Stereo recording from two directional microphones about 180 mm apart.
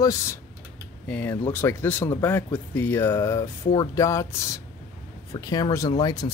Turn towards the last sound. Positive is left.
turn(degrees=25)  # may be behind; listen again after turning